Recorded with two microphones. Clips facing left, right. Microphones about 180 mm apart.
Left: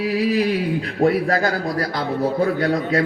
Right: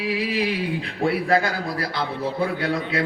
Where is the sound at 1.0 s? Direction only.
40° left (ahead or behind).